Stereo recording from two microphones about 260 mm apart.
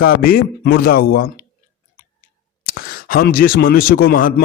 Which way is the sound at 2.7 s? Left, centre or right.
Left.